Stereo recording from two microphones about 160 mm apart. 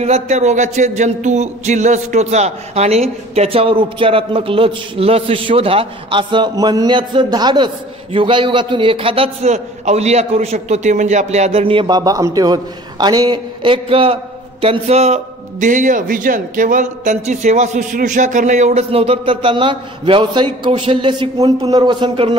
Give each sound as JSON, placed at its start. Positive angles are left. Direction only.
{"t": 0.0, "sound": "a man's voice", "side_deg": -45}
{"t": 15.6, "sound": "a man's voice", "side_deg": -55}